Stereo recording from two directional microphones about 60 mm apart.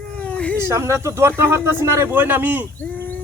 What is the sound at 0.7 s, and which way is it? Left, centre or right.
A man's voice, right.